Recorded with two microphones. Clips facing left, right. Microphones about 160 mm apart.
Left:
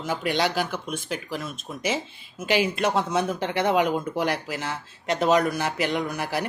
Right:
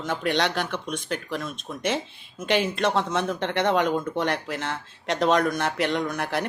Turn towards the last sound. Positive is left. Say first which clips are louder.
# right 1 dB
turn(degrees=5)  # may be behind; listen again after turning